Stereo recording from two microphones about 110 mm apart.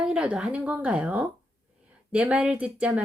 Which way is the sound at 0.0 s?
10° right (ahead or behind).